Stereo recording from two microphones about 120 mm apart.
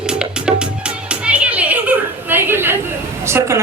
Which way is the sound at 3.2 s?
25° right (ahead or behind).